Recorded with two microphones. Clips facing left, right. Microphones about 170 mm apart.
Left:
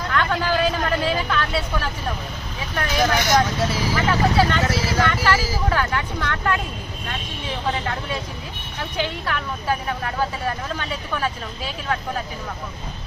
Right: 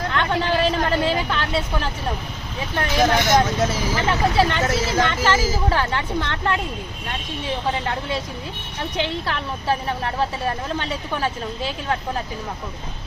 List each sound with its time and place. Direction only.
0.1 s vehicle: 25° right (ahead or behind)
2.7 s speech: 25° right (ahead or behind)
9.0 s speech: 30° right (ahead or behind)